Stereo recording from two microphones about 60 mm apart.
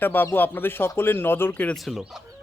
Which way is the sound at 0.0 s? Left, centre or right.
Left.